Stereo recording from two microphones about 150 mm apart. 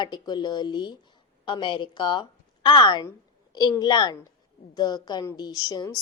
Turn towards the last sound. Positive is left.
turn(degrees=25)  # may be behind; listen again after turning